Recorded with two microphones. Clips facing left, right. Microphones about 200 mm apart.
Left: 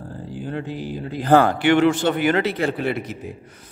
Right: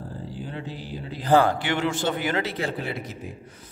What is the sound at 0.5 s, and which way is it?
A man's voice, 55° left (ahead or behind).